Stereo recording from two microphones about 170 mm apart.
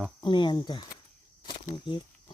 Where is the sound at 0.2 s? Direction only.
25° left (ahead or behind).